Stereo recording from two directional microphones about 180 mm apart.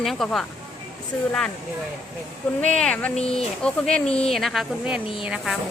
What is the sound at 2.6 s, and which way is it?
Speech, 5° left (ahead or behind).